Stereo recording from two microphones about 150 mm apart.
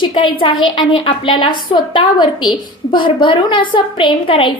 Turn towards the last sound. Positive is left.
turn(degrees=35)  # may be behind; listen again after turning